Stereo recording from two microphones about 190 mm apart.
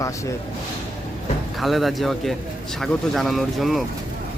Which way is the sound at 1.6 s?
Centre (ahead or behind).